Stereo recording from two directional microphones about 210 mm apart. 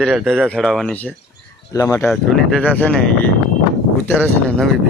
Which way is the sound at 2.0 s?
Centre (ahead or behind).